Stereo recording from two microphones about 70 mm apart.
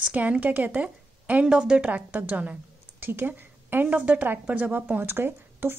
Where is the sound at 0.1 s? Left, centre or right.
Right.